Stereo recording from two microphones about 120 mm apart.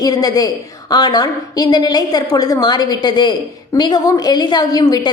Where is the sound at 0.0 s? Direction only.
35° left (ahead or behind).